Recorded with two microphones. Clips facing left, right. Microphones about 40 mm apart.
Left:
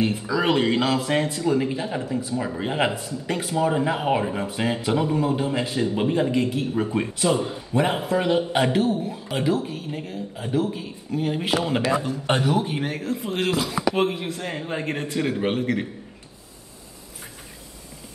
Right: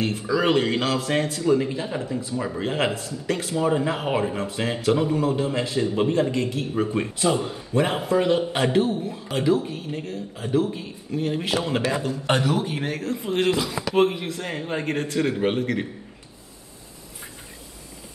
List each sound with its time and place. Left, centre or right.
0.0 s a man's voice: centre
6.6 s speech: centre